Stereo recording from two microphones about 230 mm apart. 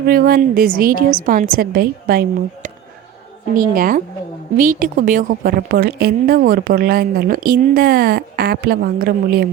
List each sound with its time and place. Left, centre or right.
0.0 s a woman's voice: right
3.5 s a woman's voice: right